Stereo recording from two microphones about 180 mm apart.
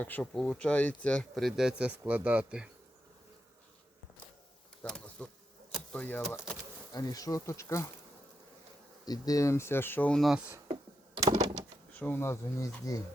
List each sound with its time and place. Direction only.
0.0 s speech: 10° left (ahead or behind)
4.8 s insect: 5° left (ahead or behind)
5.7 s a sound: 5° left (ahead or behind)
6.3 s speech: 5° right (ahead or behind)
6.9 s speech: 20° left (ahead or behind)
9.0 s speech: 20° left (ahead or behind); by 10.6 s 10° right (ahead or behind)
10.7 s computer keyboard: 25° right (ahead or behind)
11.9 s speech: 10° left (ahead or behind)